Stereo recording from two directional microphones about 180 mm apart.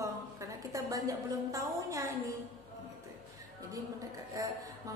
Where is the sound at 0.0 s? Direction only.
15° right (ahead or behind).